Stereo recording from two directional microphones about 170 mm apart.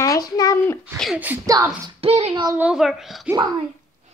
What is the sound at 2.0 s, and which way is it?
Speech, 35° right (ahead or behind).